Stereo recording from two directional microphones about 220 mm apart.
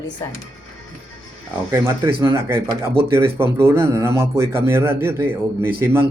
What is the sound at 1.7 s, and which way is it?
Speech, 10° right (ahead or behind).